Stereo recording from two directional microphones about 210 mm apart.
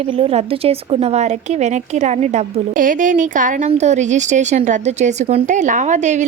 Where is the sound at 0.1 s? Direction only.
25° right (ahead or behind).